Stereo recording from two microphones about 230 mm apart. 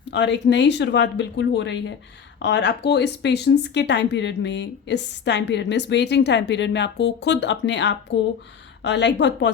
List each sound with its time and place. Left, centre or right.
0.1 s speech: left